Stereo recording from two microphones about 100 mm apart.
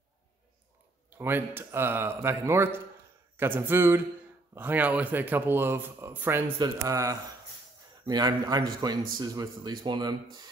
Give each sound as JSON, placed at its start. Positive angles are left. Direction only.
{"t": 1.1, "sound": "speech", "side_deg": -20}
{"t": 6.6, "sound": "a man's voice", "side_deg": -35}